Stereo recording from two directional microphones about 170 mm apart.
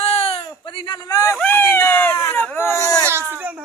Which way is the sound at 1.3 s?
10° left (ahead or behind).